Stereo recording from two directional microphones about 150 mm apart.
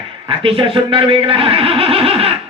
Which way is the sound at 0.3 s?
35° right (ahead or behind).